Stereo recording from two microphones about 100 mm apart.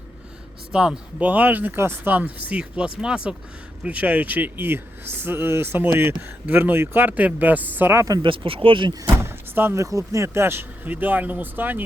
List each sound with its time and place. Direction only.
0.7 s speech: 10° right (ahead or behind); by 8.2 s 30° right (ahead or behind)
8.2 s speech: 60° right (ahead or behind)
9.0 s speech: 20° right (ahead or behind)